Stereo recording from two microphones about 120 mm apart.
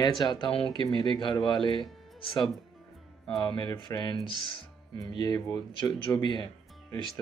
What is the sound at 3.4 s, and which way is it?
Speech, 40° left (ahead or behind).